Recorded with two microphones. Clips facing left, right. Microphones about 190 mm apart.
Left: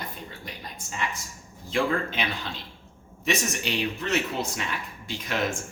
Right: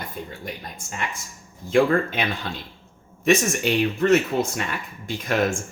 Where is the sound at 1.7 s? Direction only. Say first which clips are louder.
Right 7 dB; 50° right (ahead or behind).